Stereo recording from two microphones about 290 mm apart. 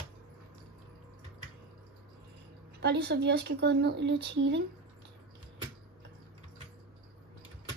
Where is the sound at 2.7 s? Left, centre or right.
Right.